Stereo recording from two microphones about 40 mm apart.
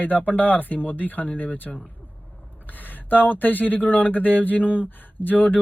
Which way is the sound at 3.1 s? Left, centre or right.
Left.